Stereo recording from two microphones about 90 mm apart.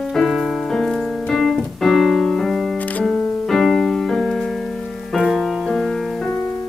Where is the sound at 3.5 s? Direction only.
5° left (ahead or behind).